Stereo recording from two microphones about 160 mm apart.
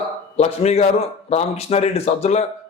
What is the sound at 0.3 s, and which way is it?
A man's voice, 40° left (ahead or behind).